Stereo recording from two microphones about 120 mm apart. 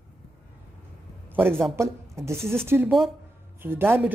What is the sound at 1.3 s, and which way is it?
Speech, 15° right (ahead or behind).